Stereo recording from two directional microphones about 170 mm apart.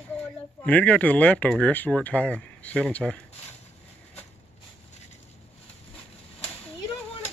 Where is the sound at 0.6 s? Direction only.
10° left (ahead or behind).